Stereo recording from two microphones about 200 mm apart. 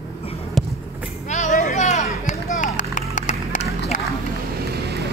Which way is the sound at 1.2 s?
35° left (ahead or behind).